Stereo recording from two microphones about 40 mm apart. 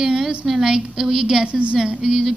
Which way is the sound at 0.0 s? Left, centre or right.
Centre.